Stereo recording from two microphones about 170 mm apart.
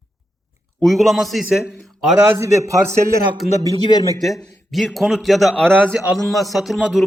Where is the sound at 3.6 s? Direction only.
25° left (ahead or behind).